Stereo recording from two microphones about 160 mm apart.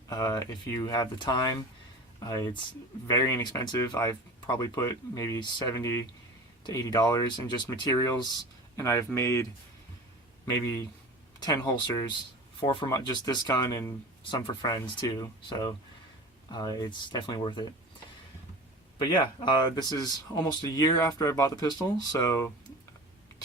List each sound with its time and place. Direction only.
0.1 s speech: 20° left (ahead or behind)
18.9 s speech: 25° left (ahead or behind)